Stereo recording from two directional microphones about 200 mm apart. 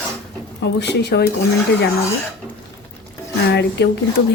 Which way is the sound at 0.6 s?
55° left (ahead or behind).